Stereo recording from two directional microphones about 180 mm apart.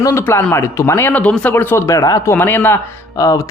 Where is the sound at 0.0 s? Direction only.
15° left (ahead or behind).